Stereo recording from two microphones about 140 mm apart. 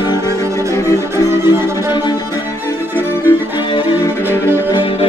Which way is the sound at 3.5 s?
35° left (ahead or behind).